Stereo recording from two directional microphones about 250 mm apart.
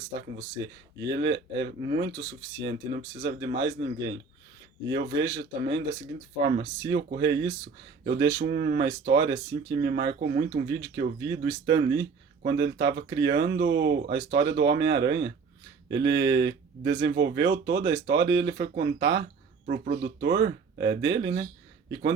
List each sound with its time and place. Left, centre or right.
0.9 s speech: right
6.4 s speech: right
6.9 s speech: right